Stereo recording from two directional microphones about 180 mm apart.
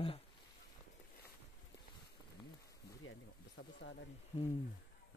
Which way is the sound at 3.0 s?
90° left.